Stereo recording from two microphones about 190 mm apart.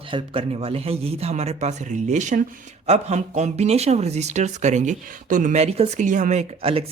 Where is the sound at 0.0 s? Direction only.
25° right (ahead or behind).